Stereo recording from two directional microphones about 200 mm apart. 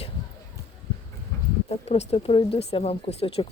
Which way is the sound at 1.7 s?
30° left (ahead or behind).